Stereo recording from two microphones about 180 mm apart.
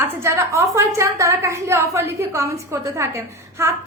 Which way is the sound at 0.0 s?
15° right (ahead or behind).